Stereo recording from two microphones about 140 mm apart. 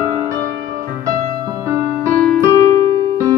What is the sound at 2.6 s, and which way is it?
Keyboard, 30° left (ahead or behind).